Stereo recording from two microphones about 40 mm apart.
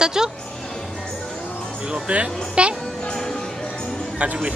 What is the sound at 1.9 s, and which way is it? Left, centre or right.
Speech, right.